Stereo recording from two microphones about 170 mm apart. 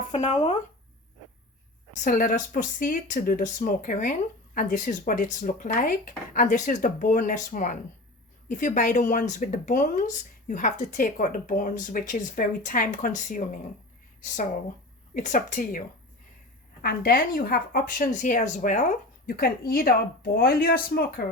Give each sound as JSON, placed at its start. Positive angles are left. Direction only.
{"t": 0.1, "sound": "a sound", "side_deg": 40}
{"t": 2.0, "sound": "speech", "side_deg": 50}
{"t": 16.8, "sound": "speech", "side_deg": 60}